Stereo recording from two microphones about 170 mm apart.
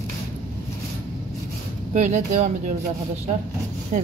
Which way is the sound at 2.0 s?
45° right (ahead or behind).